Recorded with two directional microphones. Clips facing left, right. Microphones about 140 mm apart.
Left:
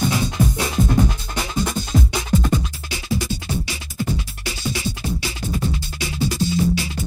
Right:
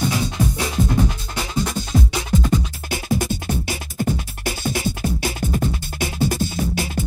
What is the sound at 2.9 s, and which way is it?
Music, 50° right (ahead or behind).